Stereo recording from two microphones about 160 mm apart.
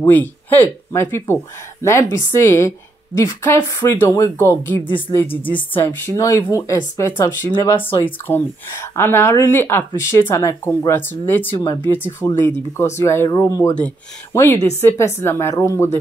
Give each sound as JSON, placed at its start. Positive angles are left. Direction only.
{"t": 0.0, "sound": "a woman's voice", "side_deg": 10}